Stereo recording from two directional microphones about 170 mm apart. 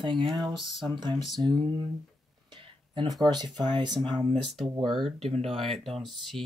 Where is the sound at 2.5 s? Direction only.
30° right (ahead or behind).